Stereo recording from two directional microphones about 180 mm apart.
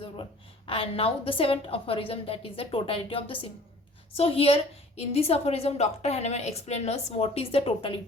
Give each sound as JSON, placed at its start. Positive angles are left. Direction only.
{"t": 0.0, "sound": "a woman's voice", "side_deg": 30}